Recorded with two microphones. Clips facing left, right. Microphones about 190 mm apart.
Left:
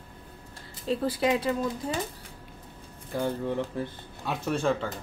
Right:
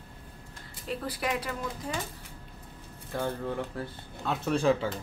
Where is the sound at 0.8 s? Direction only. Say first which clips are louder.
Left 7 dB; 30° left (ahead or behind).